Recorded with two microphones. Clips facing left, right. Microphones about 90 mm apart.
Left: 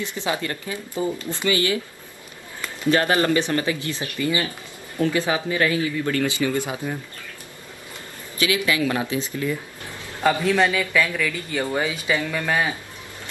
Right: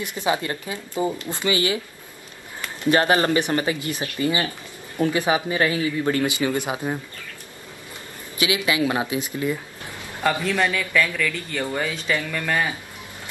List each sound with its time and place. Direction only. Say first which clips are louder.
0.0 s speech: right 2 dB; 20° right (ahead or behind)
2.9 s speech: right 1 dB; 25° right (ahead or behind)
8.4 s speech: even; 20° right (ahead or behind)
10.5 s speech: left 2 dB; 10° left (ahead or behind)